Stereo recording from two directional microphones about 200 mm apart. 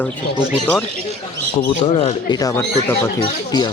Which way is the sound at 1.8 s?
25° left (ahead or behind).